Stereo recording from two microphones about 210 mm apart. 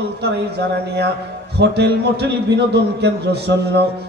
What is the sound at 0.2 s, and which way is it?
A man's voice, 50° right (ahead or behind).